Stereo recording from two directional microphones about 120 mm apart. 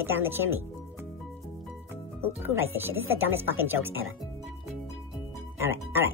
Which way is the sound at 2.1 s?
20° right (ahead or behind).